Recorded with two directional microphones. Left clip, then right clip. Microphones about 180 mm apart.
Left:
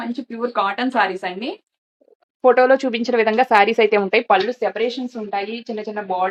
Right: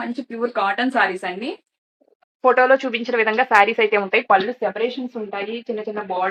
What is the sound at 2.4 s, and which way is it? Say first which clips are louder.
Speech: left 1 dB; 90° left.